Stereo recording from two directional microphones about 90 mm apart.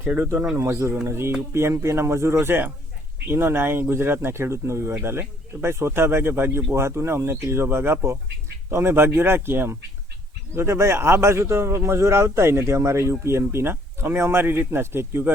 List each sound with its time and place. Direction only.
0.0 s a man's voice: 25° right (ahead or behind)